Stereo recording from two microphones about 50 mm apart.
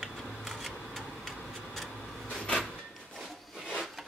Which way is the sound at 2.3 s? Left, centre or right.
Centre.